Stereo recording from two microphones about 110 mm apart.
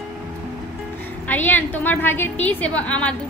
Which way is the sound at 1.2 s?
15° left (ahead or behind).